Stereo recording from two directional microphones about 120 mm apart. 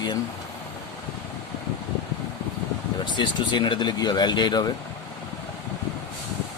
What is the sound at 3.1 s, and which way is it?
Speech, 40° left (ahead or behind).